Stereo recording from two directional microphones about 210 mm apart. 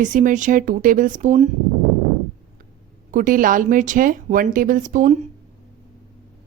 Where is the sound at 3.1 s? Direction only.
40° right (ahead or behind).